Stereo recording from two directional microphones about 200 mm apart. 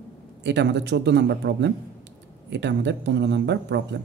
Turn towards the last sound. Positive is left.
turn(degrees=-60)  # may be behind; listen again after turning